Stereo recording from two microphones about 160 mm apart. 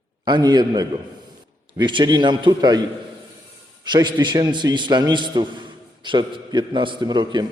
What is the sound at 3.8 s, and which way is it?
A man's voice, 25° right (ahead or behind).